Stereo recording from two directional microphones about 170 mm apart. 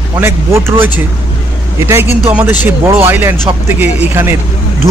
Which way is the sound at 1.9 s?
15° right (ahead or behind).